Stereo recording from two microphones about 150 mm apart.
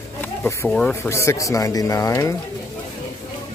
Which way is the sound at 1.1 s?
20° left (ahead or behind).